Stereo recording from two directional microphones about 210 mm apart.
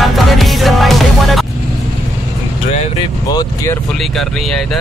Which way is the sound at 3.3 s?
20° left (ahead or behind).